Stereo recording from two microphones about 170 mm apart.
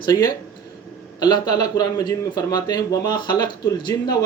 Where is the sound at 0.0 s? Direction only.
25° left (ahead or behind).